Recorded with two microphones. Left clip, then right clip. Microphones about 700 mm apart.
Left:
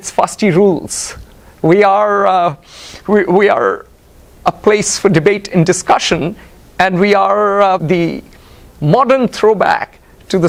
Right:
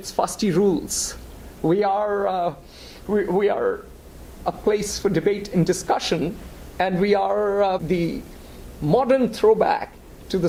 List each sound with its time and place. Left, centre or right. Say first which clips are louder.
0.2 s speech: left 10 dB; left
1.6 s a woman's voice: left 11 dB; left